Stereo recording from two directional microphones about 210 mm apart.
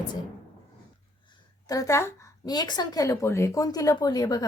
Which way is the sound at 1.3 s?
15° left (ahead or behind).